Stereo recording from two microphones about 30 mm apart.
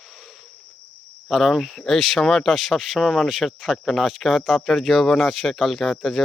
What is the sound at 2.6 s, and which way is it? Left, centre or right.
Speech, centre.